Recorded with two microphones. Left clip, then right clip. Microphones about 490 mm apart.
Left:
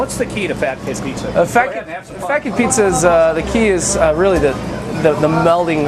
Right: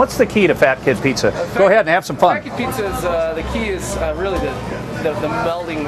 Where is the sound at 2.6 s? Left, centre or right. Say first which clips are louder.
Left 7 dB; left.